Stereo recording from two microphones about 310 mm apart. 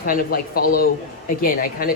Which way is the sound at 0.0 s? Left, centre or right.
Left.